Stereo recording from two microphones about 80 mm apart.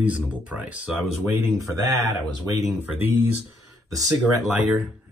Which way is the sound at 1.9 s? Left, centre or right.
Centre.